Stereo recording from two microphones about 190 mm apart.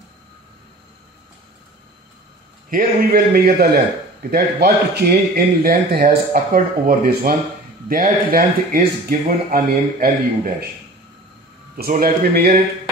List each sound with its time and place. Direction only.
2.7 s a man's voice: 50° right (ahead or behind)
11.7 s a man's voice: 50° right (ahead or behind)